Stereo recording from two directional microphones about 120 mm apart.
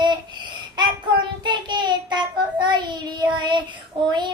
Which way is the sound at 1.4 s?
40° right (ahead or behind).